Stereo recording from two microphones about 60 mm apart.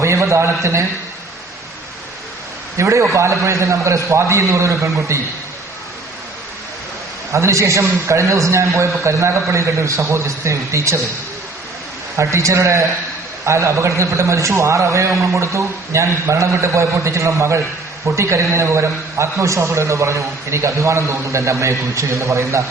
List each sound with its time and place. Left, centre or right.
0.0 s a man's voice: right
2.7 s a man's voice: right
7.3 s a man's voice: right
12.1 s a man's voice: right